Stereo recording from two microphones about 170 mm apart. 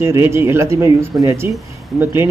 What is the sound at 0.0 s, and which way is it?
Speech, 15° right (ahead or behind).